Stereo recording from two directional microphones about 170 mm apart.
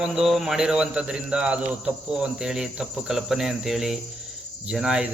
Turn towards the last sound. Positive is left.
turn(degrees=-5)  # may be behind; listen again after turning